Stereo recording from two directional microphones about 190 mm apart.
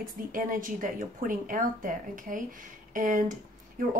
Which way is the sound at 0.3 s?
45° right (ahead or behind).